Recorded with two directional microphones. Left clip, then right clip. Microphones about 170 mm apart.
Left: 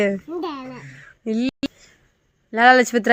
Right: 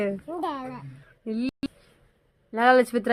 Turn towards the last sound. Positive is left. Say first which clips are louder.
# left 6 dB
turn(degrees=20)  # may be behind; listen again after turning